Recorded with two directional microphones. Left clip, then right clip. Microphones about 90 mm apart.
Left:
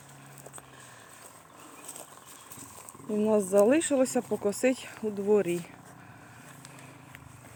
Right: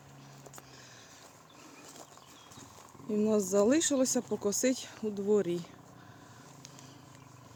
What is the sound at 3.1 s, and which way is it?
Speech, 50° right (ahead or behind).